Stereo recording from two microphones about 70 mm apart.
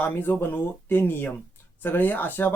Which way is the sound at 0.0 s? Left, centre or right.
Left.